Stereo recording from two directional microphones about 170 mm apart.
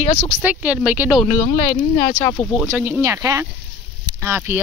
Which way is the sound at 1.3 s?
50° left (ahead or behind).